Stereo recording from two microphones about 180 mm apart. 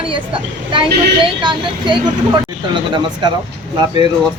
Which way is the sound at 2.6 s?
25° right (ahead or behind).